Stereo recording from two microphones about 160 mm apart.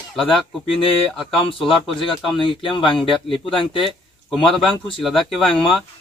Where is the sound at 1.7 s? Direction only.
35° left (ahead or behind).